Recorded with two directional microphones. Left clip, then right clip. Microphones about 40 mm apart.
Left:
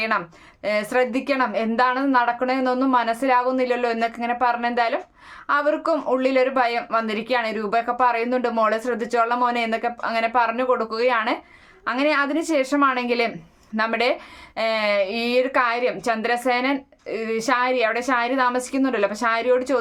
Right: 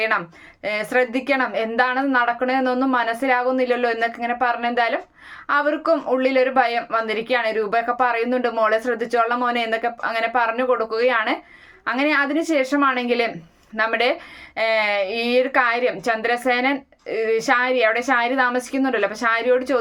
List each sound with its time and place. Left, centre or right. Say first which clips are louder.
0.6 s speech: even; left
11.9 s speech: right 1 dB; centre; by 15.6 s left
15.6 s speech: right 2 dB; left